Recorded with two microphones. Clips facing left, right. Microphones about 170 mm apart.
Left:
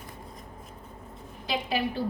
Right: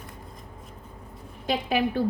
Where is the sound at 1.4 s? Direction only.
50° right (ahead or behind).